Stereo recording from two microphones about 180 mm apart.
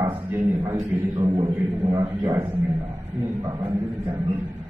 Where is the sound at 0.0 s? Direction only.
15° right (ahead or behind).